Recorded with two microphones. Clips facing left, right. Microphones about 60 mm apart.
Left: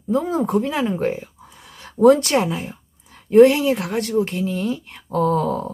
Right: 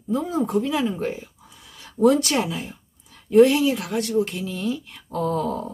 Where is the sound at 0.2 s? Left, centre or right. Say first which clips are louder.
Left 3 dB; left.